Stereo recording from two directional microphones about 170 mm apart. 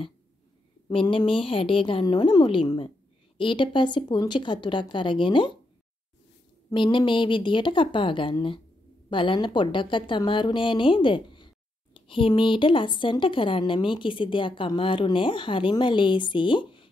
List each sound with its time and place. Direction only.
0.8 s a woman's voice: 30° left (ahead or behind)
6.7 s a woman's voice: 30° left (ahead or behind)